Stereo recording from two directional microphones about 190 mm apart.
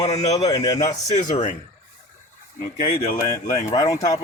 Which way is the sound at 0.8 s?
40° left (ahead or behind).